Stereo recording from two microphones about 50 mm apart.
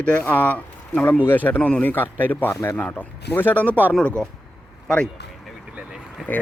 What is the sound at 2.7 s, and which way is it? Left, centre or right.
A man's voice, left.